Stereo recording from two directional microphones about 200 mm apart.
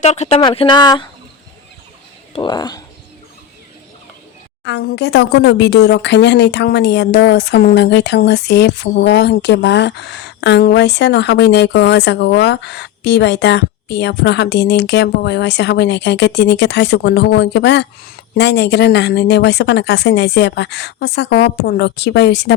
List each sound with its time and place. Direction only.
0.0 s speech: 35° left (ahead or behind)
2.3 s speech: 25° left (ahead or behind)
4.6 s speech: 55° left (ahead or behind)